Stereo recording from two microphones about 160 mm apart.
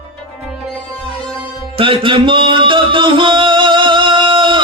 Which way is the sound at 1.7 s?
35° right (ahead or behind).